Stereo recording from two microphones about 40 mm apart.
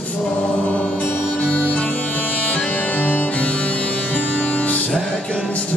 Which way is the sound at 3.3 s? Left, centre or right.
Left.